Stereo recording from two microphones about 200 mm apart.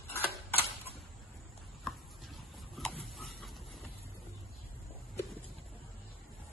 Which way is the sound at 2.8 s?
Centre (ahead or behind).